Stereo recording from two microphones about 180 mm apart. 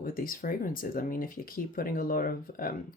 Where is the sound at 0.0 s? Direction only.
50° left (ahead or behind).